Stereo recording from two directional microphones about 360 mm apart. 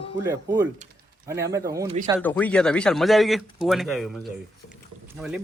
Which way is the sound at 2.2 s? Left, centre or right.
Centre.